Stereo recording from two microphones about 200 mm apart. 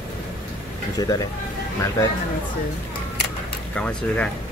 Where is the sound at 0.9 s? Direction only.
20° left (ahead or behind).